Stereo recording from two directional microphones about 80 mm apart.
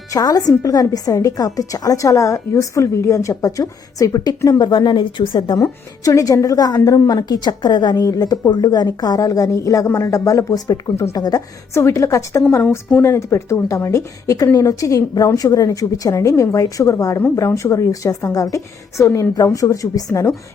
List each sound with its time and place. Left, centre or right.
0.1 s a woman's voice: left
4.4 s speech: left
5.5 s a woman's voice: left
11.7 s a woman's voice: left